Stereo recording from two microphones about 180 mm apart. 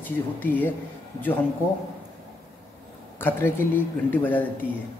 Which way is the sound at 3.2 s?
10° left (ahead or behind).